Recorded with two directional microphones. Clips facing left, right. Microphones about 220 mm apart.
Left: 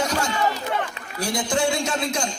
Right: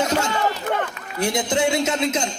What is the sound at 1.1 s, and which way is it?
A man's voice, 20° right (ahead or behind).